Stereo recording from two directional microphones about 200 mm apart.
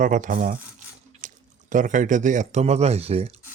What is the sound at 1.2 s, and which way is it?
Speech, 40° right (ahead or behind).